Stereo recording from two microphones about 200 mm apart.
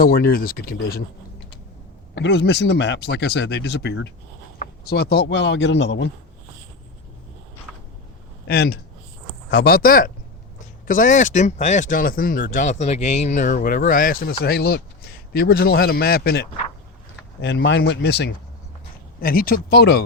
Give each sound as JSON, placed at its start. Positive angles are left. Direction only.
{"t": 0.0, "sound": "a man's voice", "side_deg": 50}
{"t": 2.1, "sound": "speech", "side_deg": 60}
{"t": 8.4, "sound": "a man's voice", "side_deg": 50}
{"t": 19.2, "sound": "a man's voice", "side_deg": 45}